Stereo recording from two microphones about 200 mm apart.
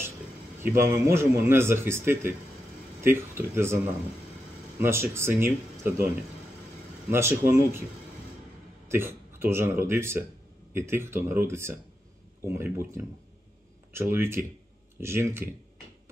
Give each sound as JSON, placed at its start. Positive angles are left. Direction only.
{"t": 0.6, "sound": "a man's voice", "side_deg": -10}
{"t": 4.7, "sound": "a man's voice", "side_deg": -10}
{"t": 7.1, "sound": "a man's voice", "side_deg": -10}
{"t": 8.8, "sound": "a man's voice", "side_deg": -10}
{"t": 14.1, "sound": "a man's voice", "side_deg": -10}